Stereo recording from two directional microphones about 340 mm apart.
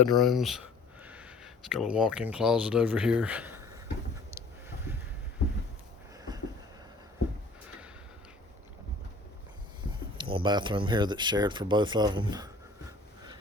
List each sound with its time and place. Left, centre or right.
0.1 s a sound: centre
1.7 s speech: centre
9.8 s speech: centre